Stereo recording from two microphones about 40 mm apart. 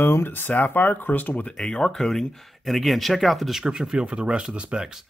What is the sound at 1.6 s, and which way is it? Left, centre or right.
Speech, centre.